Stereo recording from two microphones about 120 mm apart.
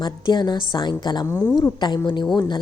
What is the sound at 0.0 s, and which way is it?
A woman's voice, 40° left (ahead or behind).